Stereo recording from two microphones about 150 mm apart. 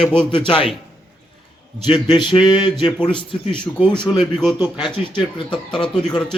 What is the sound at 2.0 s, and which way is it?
Speech, 30° left (ahead or behind).